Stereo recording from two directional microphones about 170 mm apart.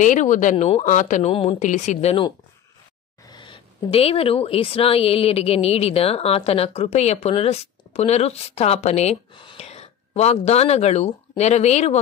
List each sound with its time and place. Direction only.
0.0 s speech: 50° left (ahead or behind)
3.3 s speech: 25° left (ahead or behind)